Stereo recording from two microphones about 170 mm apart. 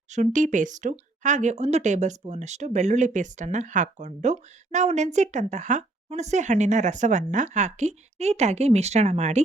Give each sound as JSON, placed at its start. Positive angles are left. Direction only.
{"t": 0.1, "sound": "speech", "side_deg": -45}